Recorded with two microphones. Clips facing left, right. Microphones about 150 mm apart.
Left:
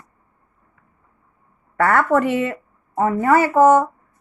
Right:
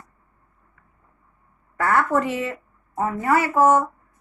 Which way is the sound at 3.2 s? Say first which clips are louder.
Left 4 dB; 55° left (ahead or behind).